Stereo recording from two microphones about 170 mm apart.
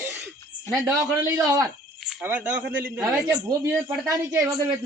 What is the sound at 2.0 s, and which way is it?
Speech, 5° right (ahead or behind).